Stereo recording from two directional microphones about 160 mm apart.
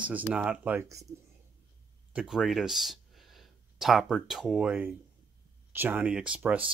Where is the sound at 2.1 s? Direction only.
5° right (ahead or behind).